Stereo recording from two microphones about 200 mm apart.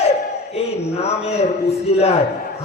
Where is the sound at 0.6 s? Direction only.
30° left (ahead or behind).